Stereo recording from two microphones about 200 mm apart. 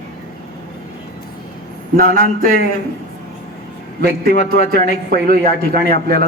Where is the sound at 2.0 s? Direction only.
45° right (ahead or behind).